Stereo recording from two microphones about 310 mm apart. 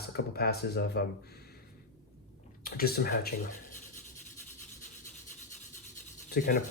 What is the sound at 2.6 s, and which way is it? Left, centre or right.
Speech, left.